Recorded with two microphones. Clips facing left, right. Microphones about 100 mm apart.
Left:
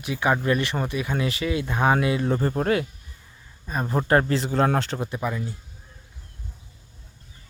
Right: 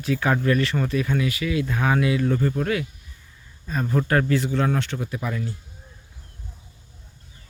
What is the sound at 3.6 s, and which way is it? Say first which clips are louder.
Speech: even; 20° left (ahead or behind).